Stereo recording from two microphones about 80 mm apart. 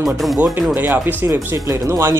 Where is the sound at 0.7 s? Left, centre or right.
Right.